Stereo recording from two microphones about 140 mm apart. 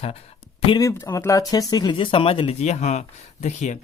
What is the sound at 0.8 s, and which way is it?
Speech, 25° left (ahead or behind).